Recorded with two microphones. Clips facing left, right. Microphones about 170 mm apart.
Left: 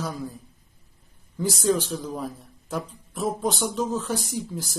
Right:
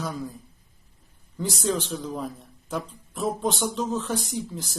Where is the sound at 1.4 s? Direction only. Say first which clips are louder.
Left 4 dB; centre (ahead or behind).